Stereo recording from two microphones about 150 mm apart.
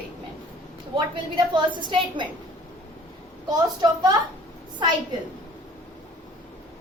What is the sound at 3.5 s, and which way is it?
Speech, 25° right (ahead or behind).